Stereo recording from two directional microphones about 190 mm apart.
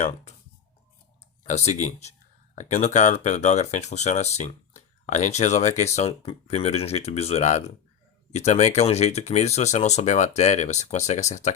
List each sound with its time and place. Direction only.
1.5 s speech: 35° left (ahead or behind)